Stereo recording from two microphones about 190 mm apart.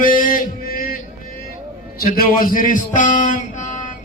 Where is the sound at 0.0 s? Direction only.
45° left (ahead or behind).